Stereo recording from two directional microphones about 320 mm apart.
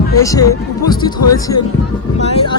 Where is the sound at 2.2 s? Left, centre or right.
Centre.